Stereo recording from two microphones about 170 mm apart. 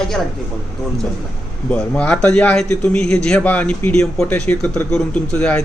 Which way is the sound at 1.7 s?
5° left (ahead or behind).